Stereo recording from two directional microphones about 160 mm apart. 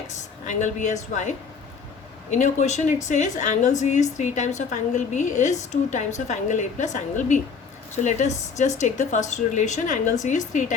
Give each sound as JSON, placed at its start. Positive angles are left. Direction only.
{"t": 0.2, "sound": "a woman's voice", "side_deg": 50}
{"t": 2.4, "sound": "a woman's voice", "side_deg": 45}